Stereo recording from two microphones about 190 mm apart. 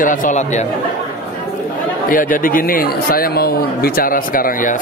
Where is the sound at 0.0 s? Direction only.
45° left (ahead or behind).